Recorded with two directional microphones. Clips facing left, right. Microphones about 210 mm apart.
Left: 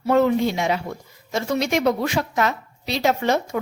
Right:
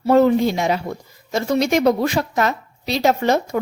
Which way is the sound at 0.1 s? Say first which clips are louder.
Right 4 dB; 35° right (ahead or behind).